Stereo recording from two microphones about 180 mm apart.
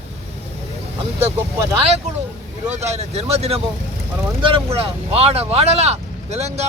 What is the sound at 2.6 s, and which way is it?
Speech, 40° right (ahead or behind).